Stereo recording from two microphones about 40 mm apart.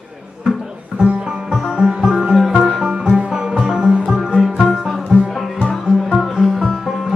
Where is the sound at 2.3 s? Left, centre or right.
Centre.